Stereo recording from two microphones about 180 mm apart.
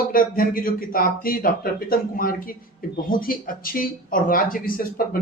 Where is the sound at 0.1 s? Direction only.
50° left (ahead or behind).